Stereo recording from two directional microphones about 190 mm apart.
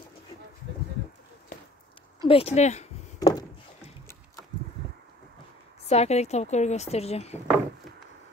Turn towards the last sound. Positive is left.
turn(degrees=35)  # may be behind; listen again after turning